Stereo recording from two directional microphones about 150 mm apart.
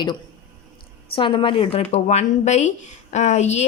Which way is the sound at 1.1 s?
35° left (ahead or behind).